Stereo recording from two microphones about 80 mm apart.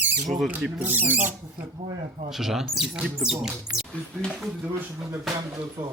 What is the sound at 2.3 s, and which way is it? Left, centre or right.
Speech, centre.